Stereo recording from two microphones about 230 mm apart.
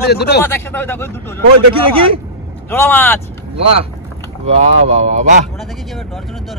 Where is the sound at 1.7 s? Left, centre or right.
Right.